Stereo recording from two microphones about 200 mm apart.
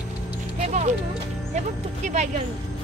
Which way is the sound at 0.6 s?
35° right (ahead or behind).